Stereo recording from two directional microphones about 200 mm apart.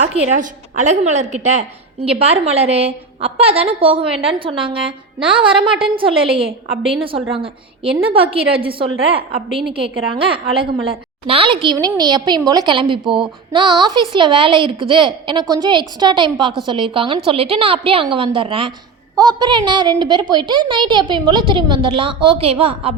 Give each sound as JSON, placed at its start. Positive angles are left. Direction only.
{"t": 0.3, "sound": "a woman's voice", "side_deg": -35}